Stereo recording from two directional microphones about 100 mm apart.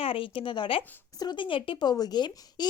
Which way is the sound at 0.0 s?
65° left (ahead or behind).